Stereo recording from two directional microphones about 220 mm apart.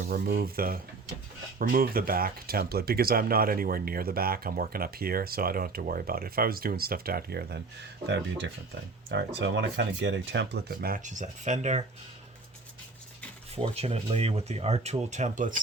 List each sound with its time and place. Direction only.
0.1 s speech: 45° right (ahead or behind)
13.6 s speech: 25° right (ahead or behind)